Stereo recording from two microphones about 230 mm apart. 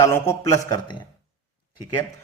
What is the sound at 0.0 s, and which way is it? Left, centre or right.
Speech, centre.